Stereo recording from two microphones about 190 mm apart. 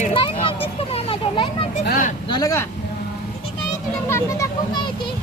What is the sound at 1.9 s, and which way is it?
Speech, 50° left (ahead or behind).